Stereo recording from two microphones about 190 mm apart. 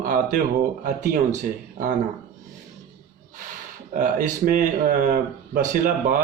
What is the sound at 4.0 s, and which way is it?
Speech, 45° right (ahead or behind).